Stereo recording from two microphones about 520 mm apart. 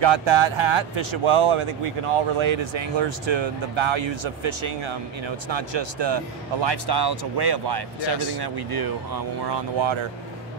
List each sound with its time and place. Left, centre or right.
0.0 s speech: right